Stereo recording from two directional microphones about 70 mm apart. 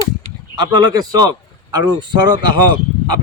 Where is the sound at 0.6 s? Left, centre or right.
Right.